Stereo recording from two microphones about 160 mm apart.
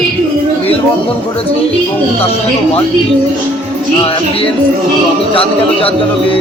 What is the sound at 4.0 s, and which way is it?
Speech, 35° left (ahead or behind).